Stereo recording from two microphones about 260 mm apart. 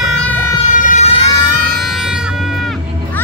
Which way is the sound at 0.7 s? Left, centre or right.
Left.